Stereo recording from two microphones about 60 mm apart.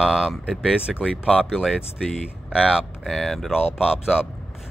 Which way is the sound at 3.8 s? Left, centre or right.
Centre.